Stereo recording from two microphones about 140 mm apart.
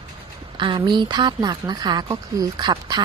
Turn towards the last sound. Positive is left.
turn(degrees=-30)  # may be behind; listen again after turning